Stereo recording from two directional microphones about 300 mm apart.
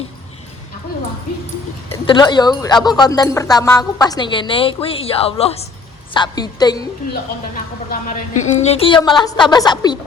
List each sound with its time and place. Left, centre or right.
1.9 s speech: centre
7.1 s speech: left; by 10.0 s centre